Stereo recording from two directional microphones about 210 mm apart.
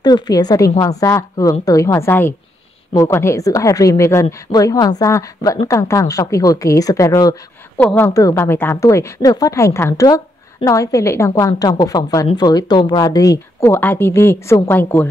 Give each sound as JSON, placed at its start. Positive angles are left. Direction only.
{"t": 0.0, "sound": "a woman's voice", "side_deg": 20}